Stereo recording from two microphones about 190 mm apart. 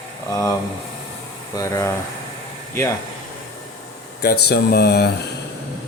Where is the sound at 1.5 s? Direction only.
15° left (ahead or behind).